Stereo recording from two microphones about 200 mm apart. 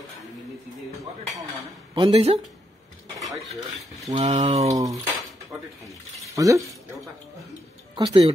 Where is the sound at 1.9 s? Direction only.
25° right (ahead or behind).